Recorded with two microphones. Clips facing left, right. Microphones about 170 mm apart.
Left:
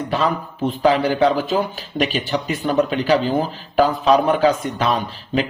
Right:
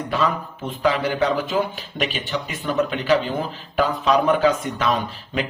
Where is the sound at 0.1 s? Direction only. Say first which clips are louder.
Left 1 dB; 35° left (ahead or behind).